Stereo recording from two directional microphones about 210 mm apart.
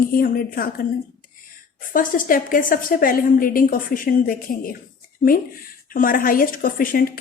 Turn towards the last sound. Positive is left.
turn(degrees=45)  # may be behind; listen again after turning